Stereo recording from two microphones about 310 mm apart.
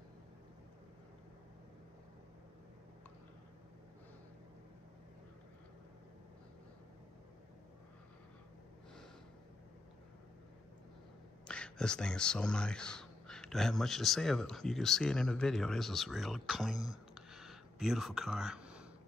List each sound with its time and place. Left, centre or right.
11.4 s speech: centre